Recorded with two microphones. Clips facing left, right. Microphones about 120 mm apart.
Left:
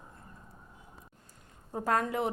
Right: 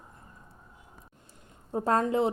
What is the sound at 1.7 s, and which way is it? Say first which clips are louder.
Speech: right 4 dB; 25° right (ahead or behind).